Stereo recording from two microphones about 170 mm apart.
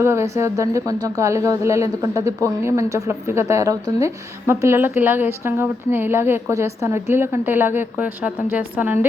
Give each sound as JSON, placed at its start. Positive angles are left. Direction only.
{"t": 0.0, "sound": "speech", "side_deg": -15}